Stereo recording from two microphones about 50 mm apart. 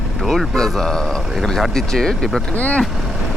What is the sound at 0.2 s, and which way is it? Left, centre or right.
Speech, centre.